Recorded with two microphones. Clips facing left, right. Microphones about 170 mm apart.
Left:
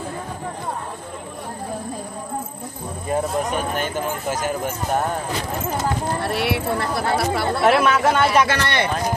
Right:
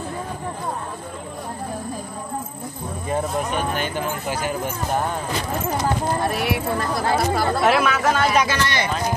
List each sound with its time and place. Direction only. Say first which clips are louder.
4.3 s speech: left 3 dB; 45° left (ahead or behind)
6.2 s speech: even; 70° left (ahead or behind)